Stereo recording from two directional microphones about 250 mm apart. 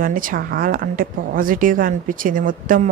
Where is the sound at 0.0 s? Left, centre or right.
Right.